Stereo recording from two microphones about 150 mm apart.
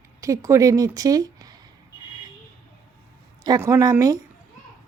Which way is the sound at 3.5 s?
20° right (ahead or behind).